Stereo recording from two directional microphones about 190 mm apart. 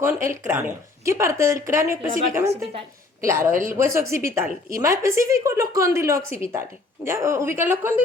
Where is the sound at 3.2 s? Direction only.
15° right (ahead or behind).